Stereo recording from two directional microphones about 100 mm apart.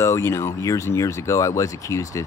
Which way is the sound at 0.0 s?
30° left (ahead or behind).